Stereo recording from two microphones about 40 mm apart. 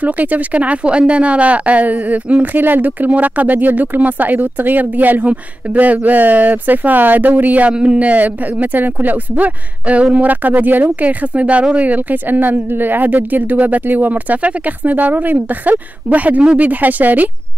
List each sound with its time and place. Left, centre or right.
0.0 s speech: right
2.4 s speech: right
7.7 s speech: right
8.0 s speech: right
9.4 s speech: right